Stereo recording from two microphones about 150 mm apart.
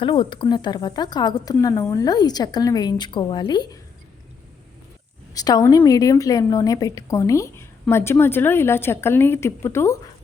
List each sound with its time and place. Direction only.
0.0 s a woman's voice: 35° left (ahead or behind)
5.3 s a woman's voice: 25° left (ahead or behind)